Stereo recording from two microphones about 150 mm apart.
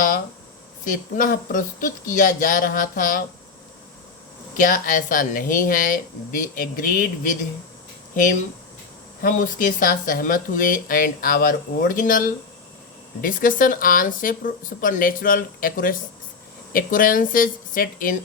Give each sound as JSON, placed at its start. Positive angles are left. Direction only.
{"t": 0.9, "sound": "speech", "side_deg": 65}
{"t": 4.5, "sound": "speech", "side_deg": 65}
{"t": 9.2, "sound": "speech", "side_deg": 65}